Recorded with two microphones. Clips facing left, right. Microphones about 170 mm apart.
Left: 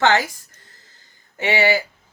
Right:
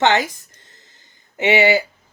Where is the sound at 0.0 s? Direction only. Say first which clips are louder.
Right 1 dB; 20° right (ahead or behind).